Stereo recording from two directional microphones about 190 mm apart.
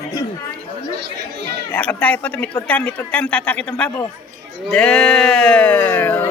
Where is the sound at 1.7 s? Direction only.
10° left (ahead or behind).